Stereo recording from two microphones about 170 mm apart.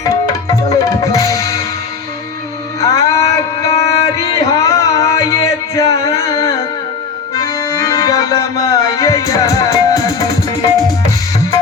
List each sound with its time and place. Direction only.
0.0 s tabla: 20° left (ahead or behind)
2.8 s a sound: 20° left (ahead or behind)
7.3 s accordion: 20° left (ahead or behind)